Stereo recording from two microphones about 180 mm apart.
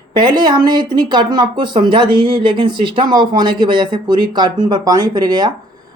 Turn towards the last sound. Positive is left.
turn(degrees=-25)  # may be behind; listen again after turning